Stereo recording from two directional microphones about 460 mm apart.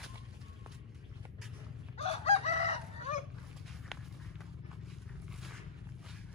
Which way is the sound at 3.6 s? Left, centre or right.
Centre.